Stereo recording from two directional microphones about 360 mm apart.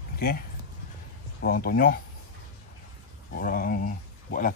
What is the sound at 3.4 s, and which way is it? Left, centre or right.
Speech, left.